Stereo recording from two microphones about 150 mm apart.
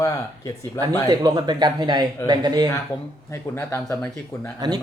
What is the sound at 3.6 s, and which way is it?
Speech, 15° left (ahead or behind).